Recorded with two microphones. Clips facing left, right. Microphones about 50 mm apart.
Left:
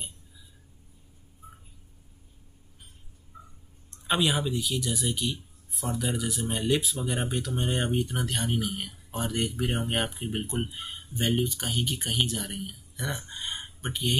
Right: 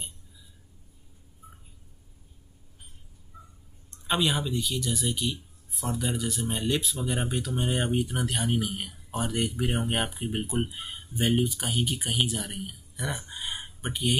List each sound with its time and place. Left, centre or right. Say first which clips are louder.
4.1 s speech: left 1 dB; centre